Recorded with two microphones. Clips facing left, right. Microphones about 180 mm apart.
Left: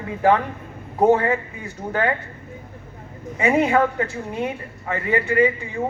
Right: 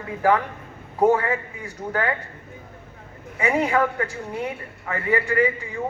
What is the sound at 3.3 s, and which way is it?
Speech, 20° left (ahead or behind).